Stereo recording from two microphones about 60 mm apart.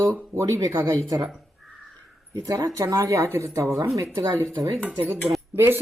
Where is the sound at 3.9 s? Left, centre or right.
Right.